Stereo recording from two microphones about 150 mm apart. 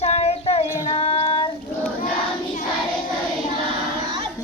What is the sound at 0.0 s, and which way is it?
Child singing, 45° left (ahead or behind).